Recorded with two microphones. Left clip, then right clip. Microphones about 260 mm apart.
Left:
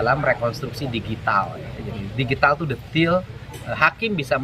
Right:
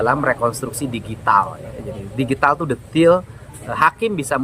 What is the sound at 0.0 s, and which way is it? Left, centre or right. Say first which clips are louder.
Speech: right 3 dB; centre.